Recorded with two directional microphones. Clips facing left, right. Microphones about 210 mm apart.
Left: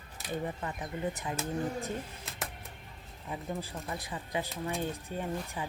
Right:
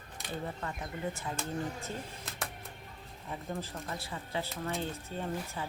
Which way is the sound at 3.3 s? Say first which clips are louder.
Left 1 dB; 15° left (ahead or behind).